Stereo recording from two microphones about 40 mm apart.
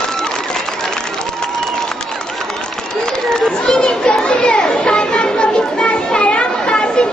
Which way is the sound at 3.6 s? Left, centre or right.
Left.